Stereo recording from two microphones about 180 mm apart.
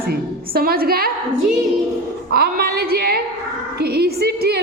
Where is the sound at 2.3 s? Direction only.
60° right (ahead or behind).